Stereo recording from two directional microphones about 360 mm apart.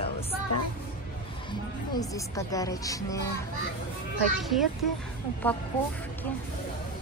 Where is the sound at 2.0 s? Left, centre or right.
Centre.